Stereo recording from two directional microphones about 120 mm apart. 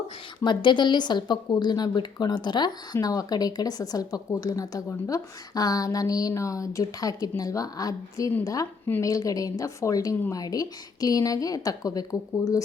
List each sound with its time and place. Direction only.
0.4 s a woman's voice: 40° left (ahead or behind)